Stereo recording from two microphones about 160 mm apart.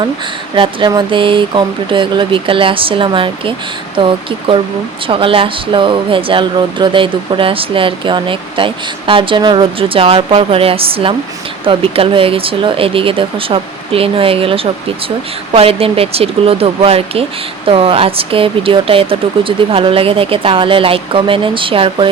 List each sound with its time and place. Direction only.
0.5 s speech: 30° right (ahead or behind)